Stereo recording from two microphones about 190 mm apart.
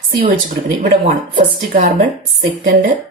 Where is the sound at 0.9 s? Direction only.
45° right (ahead or behind).